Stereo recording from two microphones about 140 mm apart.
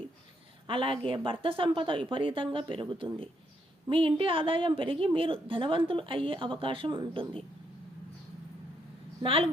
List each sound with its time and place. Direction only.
0.7 s a woman's voice: 40° right (ahead or behind)
9.2 s a woman's voice: 40° right (ahead or behind)